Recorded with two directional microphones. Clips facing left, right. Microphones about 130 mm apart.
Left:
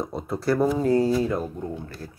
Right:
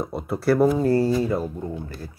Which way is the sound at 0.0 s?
5° right (ahead or behind).